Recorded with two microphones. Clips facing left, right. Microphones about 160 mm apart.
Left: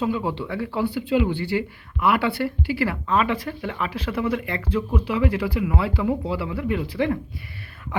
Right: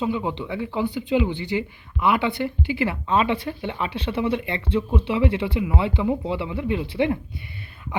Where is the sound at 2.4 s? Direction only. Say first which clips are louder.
Left 1 dB; 5° right (ahead or behind).